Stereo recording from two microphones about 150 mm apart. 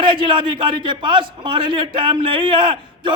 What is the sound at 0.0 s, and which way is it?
A man's voice, 35° right (ahead or behind).